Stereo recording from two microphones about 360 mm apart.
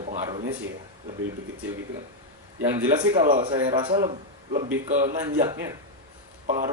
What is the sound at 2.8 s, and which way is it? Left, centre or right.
A man's voice, centre.